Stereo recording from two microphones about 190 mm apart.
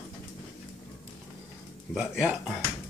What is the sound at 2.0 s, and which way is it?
Speech, 5° right (ahead or behind).